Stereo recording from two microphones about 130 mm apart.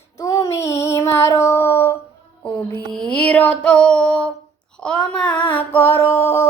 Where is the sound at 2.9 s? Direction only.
5° left (ahead or behind).